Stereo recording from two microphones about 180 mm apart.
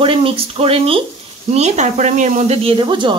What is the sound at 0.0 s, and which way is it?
Speech, 30° right (ahead or behind).